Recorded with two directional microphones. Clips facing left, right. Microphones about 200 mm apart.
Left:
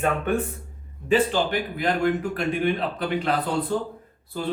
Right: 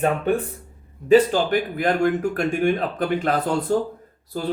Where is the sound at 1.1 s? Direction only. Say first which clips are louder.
Right 6 dB; 45° right (ahead or behind).